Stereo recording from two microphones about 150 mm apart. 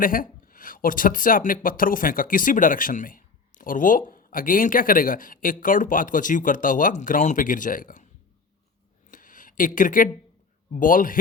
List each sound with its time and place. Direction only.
0.0 s speech: 70° left (ahead or behind)
9.0 s a sound: 65° left (ahead or behind)
10.7 s speech: 65° left (ahead or behind)